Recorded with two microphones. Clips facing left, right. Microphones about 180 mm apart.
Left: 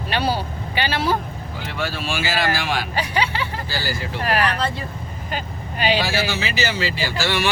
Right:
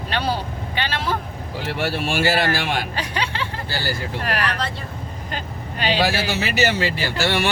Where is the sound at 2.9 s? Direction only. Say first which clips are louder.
Left 3 dB; 5° left (ahead or behind).